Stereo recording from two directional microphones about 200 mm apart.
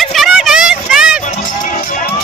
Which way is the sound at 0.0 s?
Centre (ahead or behind).